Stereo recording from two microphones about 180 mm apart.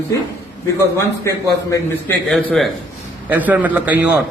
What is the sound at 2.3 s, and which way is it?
A man's voice, centre (ahead or behind).